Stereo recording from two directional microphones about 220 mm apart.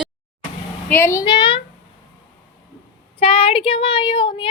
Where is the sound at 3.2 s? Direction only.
25° left (ahead or behind).